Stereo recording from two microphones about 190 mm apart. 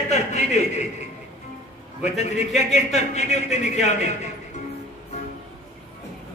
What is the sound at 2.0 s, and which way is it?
Music, 35° left (ahead or behind).